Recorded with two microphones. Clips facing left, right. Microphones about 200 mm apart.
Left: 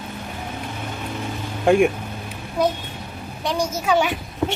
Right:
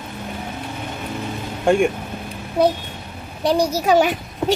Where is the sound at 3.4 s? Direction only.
35° right (ahead or behind).